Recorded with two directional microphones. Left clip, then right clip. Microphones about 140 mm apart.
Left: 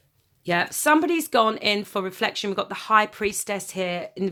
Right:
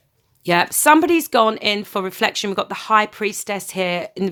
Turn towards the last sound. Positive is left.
turn(degrees=-30)  # may be behind; listen again after turning